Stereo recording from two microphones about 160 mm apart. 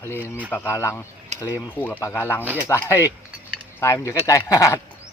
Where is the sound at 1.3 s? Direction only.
45° right (ahead or behind).